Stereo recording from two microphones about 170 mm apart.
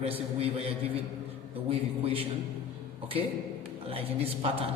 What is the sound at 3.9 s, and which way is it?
Speech, 35° right (ahead or behind).